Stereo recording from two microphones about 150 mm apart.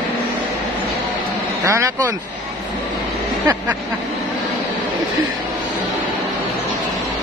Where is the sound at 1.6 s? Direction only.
20° right (ahead or behind).